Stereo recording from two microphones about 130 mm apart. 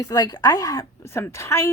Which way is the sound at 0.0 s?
30° left (ahead or behind).